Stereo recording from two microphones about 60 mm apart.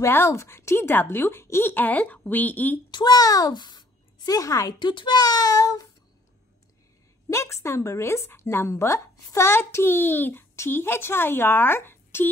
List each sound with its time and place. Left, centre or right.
0.0 s a woman's voice: left
3.1 s child singing: left
4.3 s a woman's voice: left
5.3 s child singing: left
7.2 s a woman's voice: left